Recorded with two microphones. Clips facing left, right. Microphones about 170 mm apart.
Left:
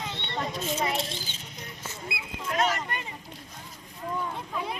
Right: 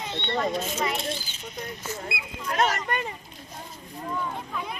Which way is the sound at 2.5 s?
40° right (ahead or behind).